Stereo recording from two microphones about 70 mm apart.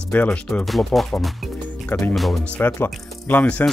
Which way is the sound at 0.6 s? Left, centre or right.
Centre.